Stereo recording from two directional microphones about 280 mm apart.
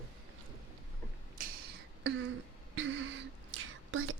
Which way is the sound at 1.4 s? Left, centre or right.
Right.